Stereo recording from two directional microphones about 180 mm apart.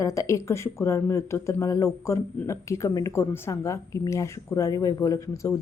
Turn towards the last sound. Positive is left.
turn(degrees=15)  # may be behind; listen again after turning